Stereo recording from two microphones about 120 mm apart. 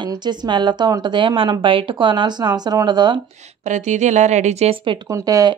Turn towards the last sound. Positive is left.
turn(degrees=-30)  # may be behind; listen again after turning